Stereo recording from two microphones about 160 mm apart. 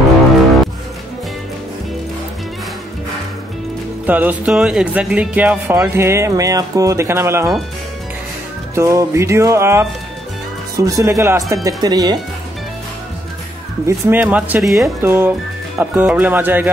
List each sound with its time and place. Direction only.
4.0 s speech: 10° right (ahead or behind)
8.7 s speech: 20° right (ahead or behind)
13.8 s speech: 15° right (ahead or behind)
15.0 s speech: 15° right (ahead or behind)